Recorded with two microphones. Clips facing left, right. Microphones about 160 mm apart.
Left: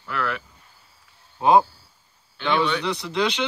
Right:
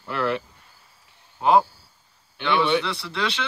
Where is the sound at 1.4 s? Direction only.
20° left (ahead or behind).